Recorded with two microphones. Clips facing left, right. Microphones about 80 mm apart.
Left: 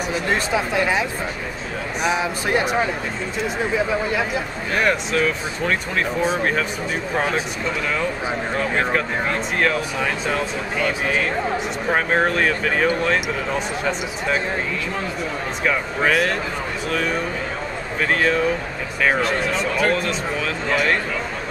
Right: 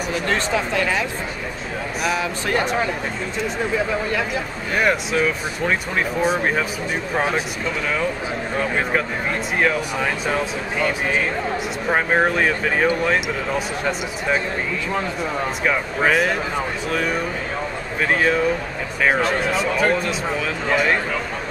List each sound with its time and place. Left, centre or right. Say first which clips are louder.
0.1 s speech: even; centre
2.0 s speech: left 2 dB; centre
4.7 s speech: right 1 dB; centre
8.5 s speech: right 1 dB; centre
15.6 s speech: even; centre